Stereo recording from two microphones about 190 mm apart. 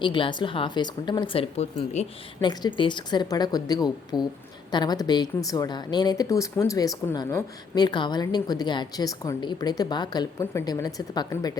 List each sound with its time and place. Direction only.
0.0 s a woman's voice: 25° left (ahead or behind)
2.4 s a woman's voice: 20° left (ahead or behind)